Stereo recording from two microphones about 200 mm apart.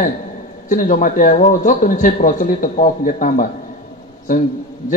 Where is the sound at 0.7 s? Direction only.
40° left (ahead or behind).